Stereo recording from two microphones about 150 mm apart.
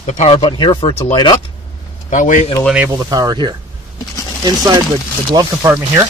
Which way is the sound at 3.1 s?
25° right (ahead or behind).